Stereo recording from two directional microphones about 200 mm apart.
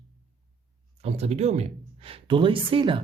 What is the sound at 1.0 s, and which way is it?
Speech, 30° right (ahead or behind).